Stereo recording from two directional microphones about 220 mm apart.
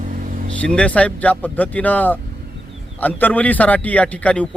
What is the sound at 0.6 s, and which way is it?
A man's voice, 5° left (ahead or behind).